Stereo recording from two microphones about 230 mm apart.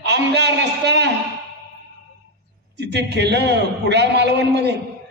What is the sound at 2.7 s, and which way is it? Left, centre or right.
A man's voice, right.